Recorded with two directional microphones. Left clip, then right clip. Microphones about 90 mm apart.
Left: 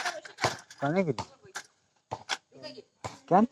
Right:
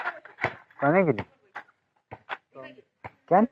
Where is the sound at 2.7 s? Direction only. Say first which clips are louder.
Left 3 dB; 35° right (ahead or behind).